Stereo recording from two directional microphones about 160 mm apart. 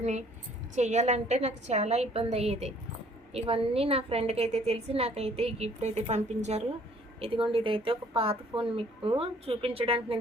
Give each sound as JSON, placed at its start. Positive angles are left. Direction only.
{"t": 0.0, "sound": "a woman's voice", "side_deg": -45}